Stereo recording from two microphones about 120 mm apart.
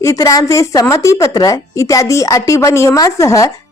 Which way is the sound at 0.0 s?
25° left (ahead or behind).